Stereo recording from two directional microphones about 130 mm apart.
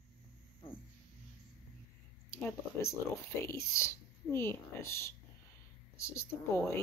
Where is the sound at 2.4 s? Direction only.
15° left (ahead or behind).